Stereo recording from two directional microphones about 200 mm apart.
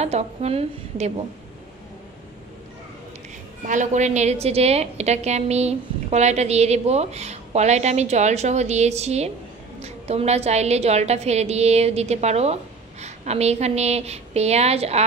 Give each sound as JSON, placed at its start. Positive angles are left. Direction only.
{"t": 0.0, "sound": "a woman's voice", "side_deg": -35}
{"t": 3.6, "sound": "a woman's voice", "side_deg": -40}